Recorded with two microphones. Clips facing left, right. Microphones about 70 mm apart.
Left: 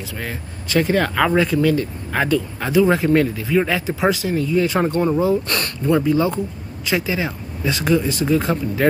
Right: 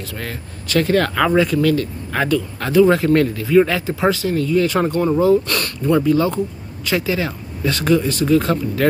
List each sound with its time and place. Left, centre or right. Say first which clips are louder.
0.2 s speech: even; centre
1.4 s speech: right 1 dB; left